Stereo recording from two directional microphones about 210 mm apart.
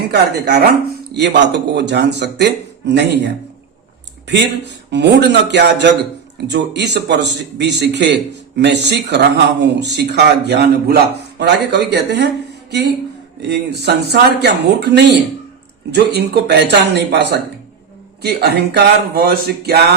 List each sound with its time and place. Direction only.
0.1 s a man's voice: 50° right (ahead or behind)
4.9 s a man's voice: 55° right (ahead or behind)
13.5 s a man's voice: 50° right (ahead or behind)